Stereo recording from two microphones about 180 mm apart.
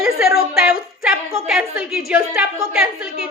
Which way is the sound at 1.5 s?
5° right (ahead or behind).